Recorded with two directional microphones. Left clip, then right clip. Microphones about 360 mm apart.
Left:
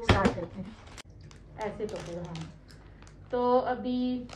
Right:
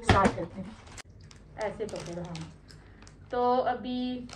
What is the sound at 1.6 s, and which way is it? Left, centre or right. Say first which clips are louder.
A woman's voice: right 1 dB; centre.